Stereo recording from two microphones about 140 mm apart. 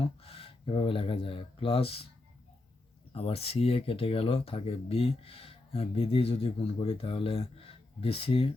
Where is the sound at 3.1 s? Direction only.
45° left (ahead or behind).